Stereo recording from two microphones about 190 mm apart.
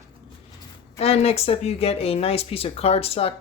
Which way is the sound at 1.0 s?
30° left (ahead or behind).